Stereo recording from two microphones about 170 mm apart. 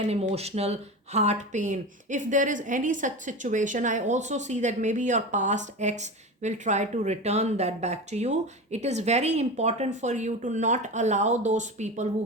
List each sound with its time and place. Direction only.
0.1 s speech: 35° right (ahead or behind)